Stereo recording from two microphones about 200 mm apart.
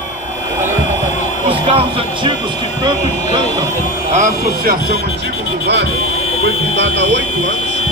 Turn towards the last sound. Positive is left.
turn(degrees=-65)  # may be behind; listen again after turning